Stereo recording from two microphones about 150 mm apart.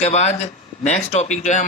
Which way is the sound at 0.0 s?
45° left (ahead or behind).